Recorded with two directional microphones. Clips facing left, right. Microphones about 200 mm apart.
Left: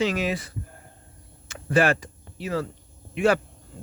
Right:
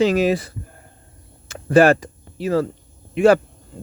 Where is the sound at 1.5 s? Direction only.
40° right (ahead or behind).